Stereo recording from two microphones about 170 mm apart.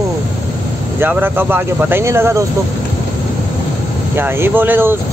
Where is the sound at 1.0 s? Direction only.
10° right (ahead or behind).